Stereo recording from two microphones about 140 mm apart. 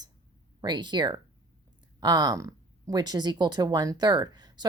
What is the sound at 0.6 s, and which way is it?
Speech, 30° right (ahead or behind).